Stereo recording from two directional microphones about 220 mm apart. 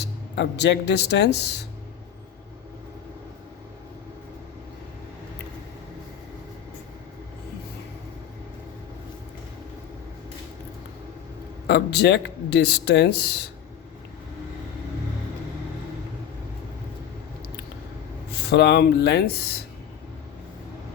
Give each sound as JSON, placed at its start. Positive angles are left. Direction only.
{"t": 0.0, "sound": "speech", "side_deg": 50}
{"t": 11.7, "sound": "speech", "side_deg": 50}
{"t": 18.3, "sound": "speech", "side_deg": 50}